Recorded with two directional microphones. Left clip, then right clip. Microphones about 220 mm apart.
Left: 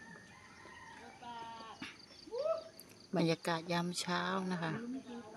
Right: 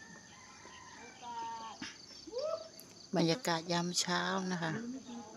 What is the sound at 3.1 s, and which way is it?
Speech, 5° right (ahead or behind).